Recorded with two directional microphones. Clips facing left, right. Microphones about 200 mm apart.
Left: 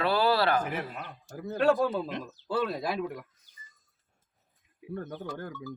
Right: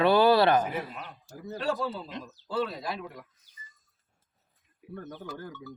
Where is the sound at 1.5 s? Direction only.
55° left (ahead or behind).